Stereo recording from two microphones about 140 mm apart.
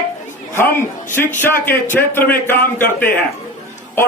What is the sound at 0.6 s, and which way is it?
A man's voice, 15° left (ahead or behind).